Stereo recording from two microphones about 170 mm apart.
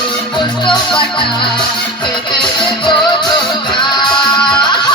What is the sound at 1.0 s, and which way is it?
Music, 30° left (ahead or behind).